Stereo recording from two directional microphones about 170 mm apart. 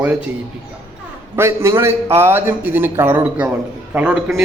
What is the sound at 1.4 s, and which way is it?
A man's voice, 15° right (ahead or behind).